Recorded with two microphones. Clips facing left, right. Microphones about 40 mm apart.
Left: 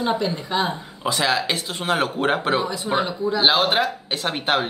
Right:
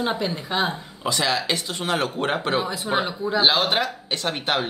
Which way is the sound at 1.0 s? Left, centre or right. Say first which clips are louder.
Left 2 dB; centre.